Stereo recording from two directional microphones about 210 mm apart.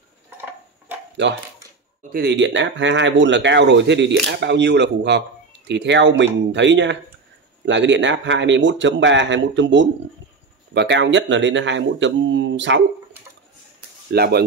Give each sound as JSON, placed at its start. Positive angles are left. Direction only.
{"t": 1.2, "sound": "speech", "side_deg": -55}
{"t": 14.1, "sound": "speech", "side_deg": -50}